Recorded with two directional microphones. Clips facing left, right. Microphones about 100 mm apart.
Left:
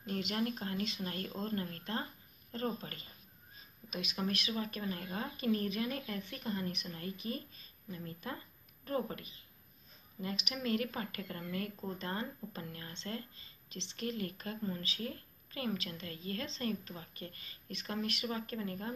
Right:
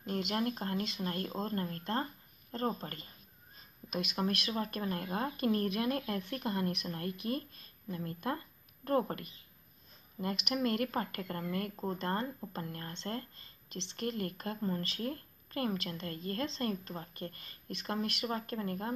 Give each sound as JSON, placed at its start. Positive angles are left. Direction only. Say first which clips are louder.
{"t": 0.0, "sound": "a woman's voice", "louder": "right 2 dB", "side_deg": -40}
{"t": 11.7, "sound": "speech", "louder": "right 5 dB", "side_deg": -35}
{"t": 12.0, "sound": "speech", "louder": "right 4 dB", "side_deg": -50}